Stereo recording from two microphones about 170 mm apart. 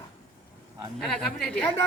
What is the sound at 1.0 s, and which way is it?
Speech, 5° left (ahead or behind).